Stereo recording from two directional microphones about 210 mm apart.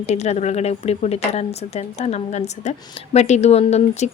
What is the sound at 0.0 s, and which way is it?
Speech, 30° left (ahead or behind).